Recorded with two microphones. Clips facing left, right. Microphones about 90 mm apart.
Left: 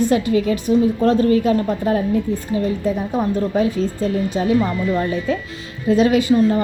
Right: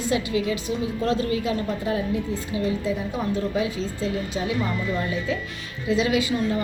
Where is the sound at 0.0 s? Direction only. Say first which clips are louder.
Left 7 dB; 50° left (ahead or behind).